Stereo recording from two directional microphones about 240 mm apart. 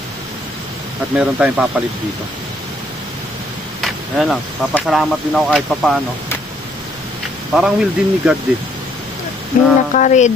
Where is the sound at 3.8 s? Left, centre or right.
Centre.